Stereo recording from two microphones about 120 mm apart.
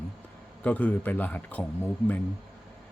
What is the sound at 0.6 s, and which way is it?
Speech, 10° left (ahead or behind).